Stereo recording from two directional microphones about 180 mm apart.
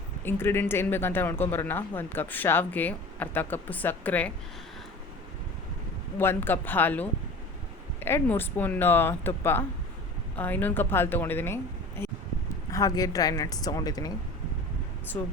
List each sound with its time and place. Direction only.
0.3 s a woman's voice: 15° left (ahead or behind)
6.1 s a woman's voice: 10° left (ahead or behind)
15.1 s a woman's voice: 15° left (ahead or behind)